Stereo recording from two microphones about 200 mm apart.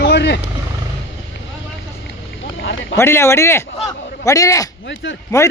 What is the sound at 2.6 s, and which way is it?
Boat, 65° left (ahead or behind).